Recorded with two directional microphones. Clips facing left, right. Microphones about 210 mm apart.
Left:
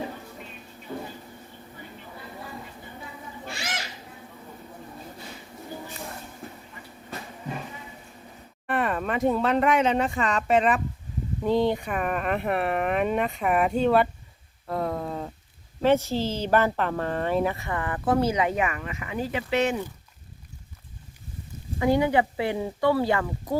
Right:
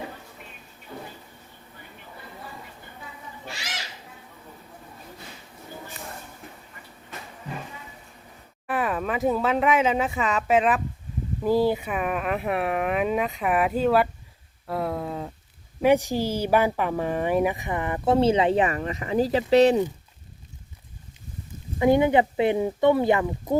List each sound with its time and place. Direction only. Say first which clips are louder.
8.6 s speech: even; centre (ahead or behind)
15.8 s speech: right 2 dB; 15° right (ahead or behind); by 19.8 s 35° right (ahead or behind)
21.8 s speech: right 3 dB; 20° right (ahead or behind)